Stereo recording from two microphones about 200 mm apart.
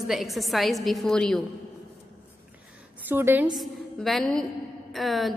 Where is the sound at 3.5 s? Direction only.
Centre (ahead or behind).